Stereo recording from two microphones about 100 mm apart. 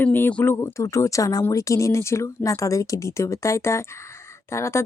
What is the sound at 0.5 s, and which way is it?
Speech, 30° left (ahead or behind).